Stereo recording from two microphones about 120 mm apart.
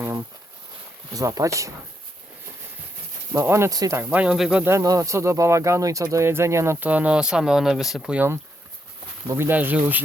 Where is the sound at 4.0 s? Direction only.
10° right (ahead or behind).